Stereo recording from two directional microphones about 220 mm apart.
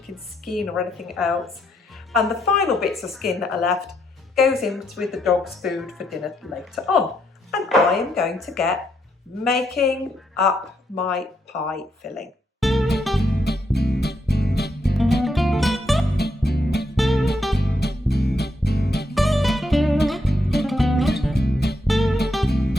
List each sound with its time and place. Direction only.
0.4 s speech: centre (ahead or behind)
11.7 s guitar: centre (ahead or behind)
13.0 s music: centre (ahead or behind)
13.2 s music: 45° left (ahead or behind)
15.2 s music: centre (ahead or behind)
16.1 s music: 50° left (ahead or behind)
17.0 s music: centre (ahead or behind)
17.6 s music: 50° left (ahead or behind)
19.1 s music: centre (ahead or behind)
21.3 s music: 45° left (ahead or behind)
21.8 s music: centre (ahead or behind)